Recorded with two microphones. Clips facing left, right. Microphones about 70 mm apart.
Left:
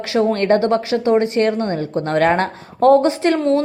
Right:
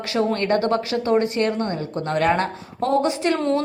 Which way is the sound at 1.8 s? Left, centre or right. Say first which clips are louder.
Left 5 dB; left.